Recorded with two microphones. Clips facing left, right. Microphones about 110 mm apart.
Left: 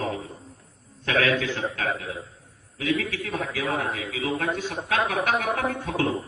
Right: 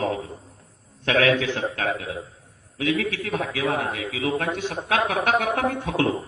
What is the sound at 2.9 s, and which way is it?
A man's voice, 70° right (ahead or behind).